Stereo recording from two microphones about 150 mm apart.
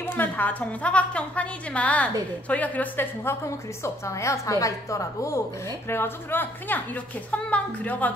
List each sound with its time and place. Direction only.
0.0 s a woman's voice: 15° left (ahead or behind)